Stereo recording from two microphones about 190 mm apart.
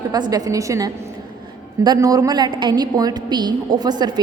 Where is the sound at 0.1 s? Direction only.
20° right (ahead or behind).